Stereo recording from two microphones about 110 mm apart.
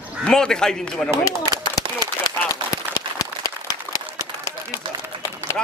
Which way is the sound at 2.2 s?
35° left (ahead or behind).